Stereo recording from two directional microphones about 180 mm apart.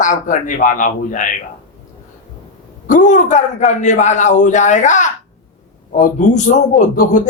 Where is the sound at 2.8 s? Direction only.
45° left (ahead or behind).